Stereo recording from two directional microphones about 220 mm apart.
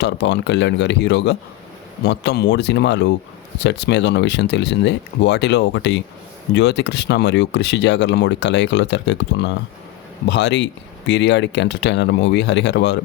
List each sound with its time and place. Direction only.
0.0 s speech: 50° left (ahead or behind)